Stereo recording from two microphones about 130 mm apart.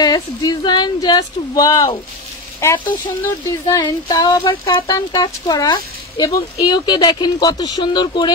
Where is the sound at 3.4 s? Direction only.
35° left (ahead or behind).